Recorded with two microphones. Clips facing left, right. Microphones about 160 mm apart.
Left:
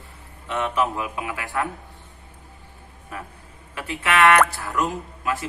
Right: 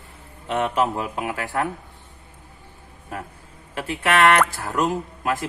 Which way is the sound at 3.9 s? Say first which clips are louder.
Even; 40° right (ahead or behind).